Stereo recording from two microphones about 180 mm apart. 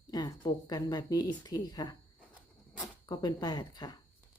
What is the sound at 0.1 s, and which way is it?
A woman's voice, 20° left (ahead or behind).